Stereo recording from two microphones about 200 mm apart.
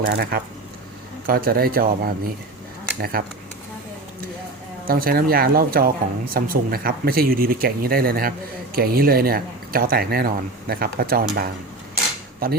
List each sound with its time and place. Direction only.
0.0 s speech: 55° right (ahead or behind)
4.9 s speech: 45° right (ahead or behind)
12.4 s speech: 50° right (ahead or behind)